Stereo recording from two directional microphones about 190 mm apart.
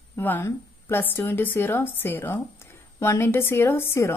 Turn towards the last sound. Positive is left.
turn(degrees=10)  # may be behind; listen again after turning